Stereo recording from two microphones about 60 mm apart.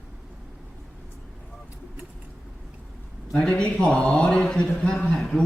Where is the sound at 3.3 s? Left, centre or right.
Centre.